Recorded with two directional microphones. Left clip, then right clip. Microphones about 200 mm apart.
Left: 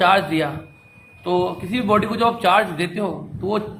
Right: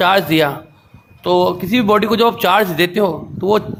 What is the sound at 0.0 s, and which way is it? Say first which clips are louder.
A man's voice: right 4 dB; 55° right (ahead or behind).